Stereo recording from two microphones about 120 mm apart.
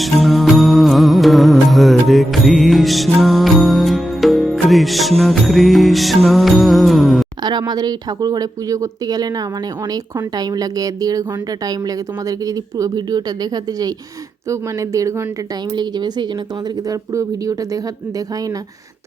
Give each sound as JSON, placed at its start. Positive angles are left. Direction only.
{"t": 0.0, "sound": "music", "side_deg": 0}
{"t": 7.7, "sound": "a woman's voice", "side_deg": -35}
{"t": 15.7, "sound": "a woman's voice", "side_deg": -35}